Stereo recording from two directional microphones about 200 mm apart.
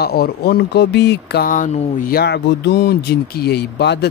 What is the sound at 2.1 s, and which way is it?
A man's voice, 55° left (ahead or behind).